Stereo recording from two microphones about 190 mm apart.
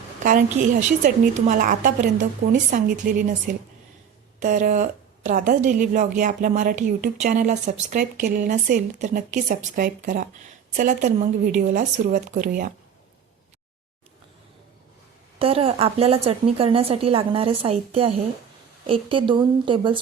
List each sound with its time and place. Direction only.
0.2 s a woman's voice: 40° right (ahead or behind)
15.4 s a woman's voice: 30° right (ahead or behind)